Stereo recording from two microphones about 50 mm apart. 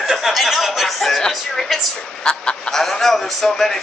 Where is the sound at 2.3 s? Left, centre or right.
Left.